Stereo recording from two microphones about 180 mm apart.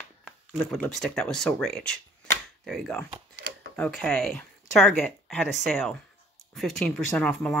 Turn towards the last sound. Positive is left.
turn(degrees=5)  # may be behind; listen again after turning